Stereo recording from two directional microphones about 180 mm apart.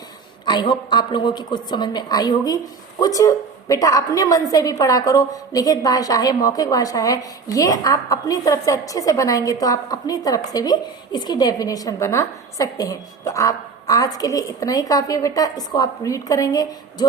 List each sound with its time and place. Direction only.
0.4 s a woman's voice: 25° left (ahead or behind)